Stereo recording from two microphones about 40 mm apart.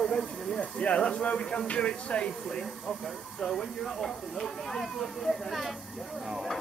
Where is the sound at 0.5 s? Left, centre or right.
Left.